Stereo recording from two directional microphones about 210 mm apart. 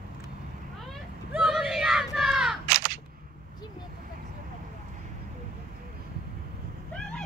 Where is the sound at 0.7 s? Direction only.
Centre (ahead or behind).